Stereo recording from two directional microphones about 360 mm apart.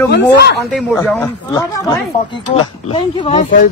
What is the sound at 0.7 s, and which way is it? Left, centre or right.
A man's voice, centre.